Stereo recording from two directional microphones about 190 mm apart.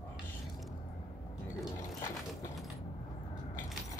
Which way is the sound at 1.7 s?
20° left (ahead or behind).